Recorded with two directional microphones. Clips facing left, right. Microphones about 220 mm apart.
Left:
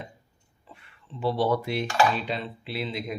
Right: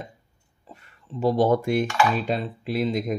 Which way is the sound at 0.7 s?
40° right (ahead or behind).